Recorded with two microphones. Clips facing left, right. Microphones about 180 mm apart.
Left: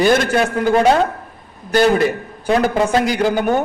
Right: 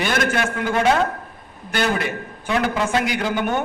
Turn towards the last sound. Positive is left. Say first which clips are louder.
# left 6 dB
turn(degrees=40)  # may be behind; listen again after turning